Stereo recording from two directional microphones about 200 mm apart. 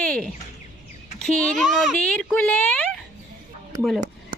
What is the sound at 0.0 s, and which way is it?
Bird, 5° left (ahead or behind).